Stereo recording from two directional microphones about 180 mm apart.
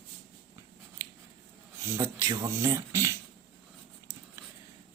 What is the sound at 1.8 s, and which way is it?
Speech, 15° right (ahead or behind).